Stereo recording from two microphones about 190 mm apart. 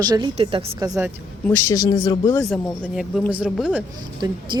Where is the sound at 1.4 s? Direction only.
15° left (ahead or behind).